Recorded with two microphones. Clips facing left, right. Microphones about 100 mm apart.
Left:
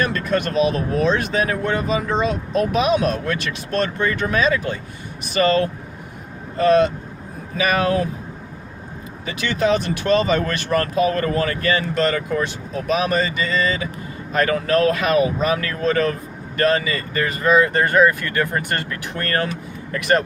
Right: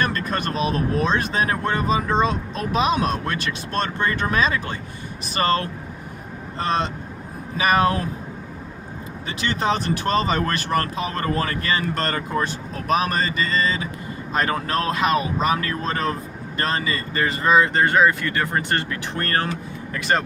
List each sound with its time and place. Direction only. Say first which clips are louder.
0.0 s speech: left 3 dB; 35° right (ahead or behind)
6.6 s speech: left 8 dB; 30° right (ahead or behind)
9.2 s speech: left 3 dB; 35° right (ahead or behind)